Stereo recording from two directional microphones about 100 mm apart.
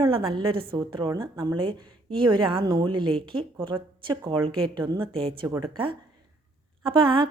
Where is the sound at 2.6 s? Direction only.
45° right (ahead or behind).